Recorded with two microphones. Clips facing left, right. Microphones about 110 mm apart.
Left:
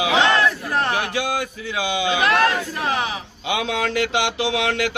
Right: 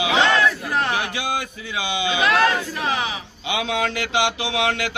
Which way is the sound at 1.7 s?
45° left (ahead or behind).